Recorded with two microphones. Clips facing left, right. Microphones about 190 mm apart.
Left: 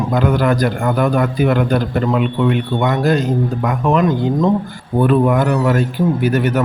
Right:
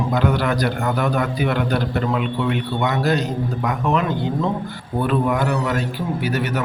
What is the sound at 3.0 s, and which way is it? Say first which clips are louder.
A man's voice: left 5 dB; 50° left (ahead or behind).